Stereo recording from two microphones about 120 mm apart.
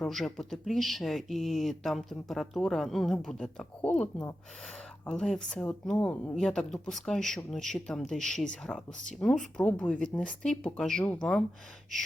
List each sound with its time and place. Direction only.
0.0 s speech: 5° left (ahead or behind)